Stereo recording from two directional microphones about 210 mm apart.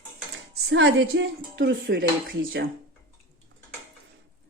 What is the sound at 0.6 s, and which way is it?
Speech, 55° right (ahead or behind).